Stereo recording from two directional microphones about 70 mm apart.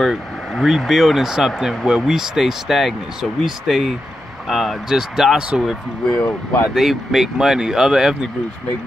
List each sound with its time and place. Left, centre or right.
0.0 s speech: centre
6.1 s speech: left
6.7 s speech: centre